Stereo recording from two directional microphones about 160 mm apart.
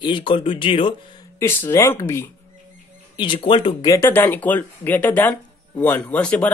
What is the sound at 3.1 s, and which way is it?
Speech, 30° left (ahead or behind).